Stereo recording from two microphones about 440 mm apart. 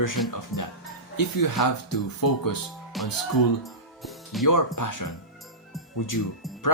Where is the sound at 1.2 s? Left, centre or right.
Left.